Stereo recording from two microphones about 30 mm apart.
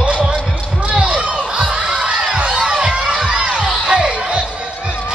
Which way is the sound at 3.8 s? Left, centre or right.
Right.